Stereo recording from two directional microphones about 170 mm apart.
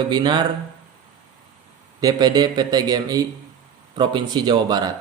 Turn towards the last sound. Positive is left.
turn(degrees=-25)  # may be behind; listen again after turning